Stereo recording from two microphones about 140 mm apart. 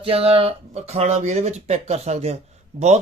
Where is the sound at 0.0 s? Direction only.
45° right (ahead or behind).